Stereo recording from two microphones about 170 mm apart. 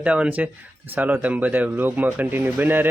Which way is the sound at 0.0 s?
5° right (ahead or behind).